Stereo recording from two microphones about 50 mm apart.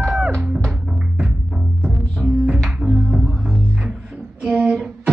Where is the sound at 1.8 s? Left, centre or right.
Centre.